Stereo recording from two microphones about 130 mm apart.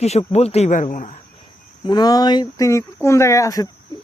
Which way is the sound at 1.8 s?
30° left (ahead or behind).